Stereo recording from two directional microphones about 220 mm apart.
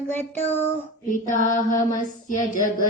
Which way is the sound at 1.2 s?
35° left (ahead or behind).